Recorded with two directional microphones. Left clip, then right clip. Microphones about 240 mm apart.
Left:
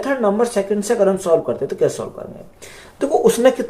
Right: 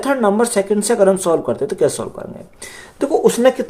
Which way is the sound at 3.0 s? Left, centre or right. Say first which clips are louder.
Right 1 dB; right.